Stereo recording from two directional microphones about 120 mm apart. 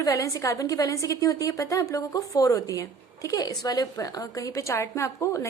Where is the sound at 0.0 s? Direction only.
30° left (ahead or behind).